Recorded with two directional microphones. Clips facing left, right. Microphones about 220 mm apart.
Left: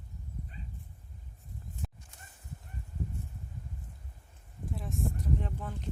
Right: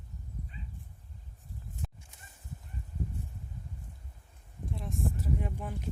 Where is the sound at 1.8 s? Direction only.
Centre (ahead or behind).